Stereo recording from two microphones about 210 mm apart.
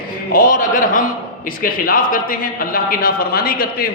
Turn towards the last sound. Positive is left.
turn(degrees=45)  # may be behind; listen again after turning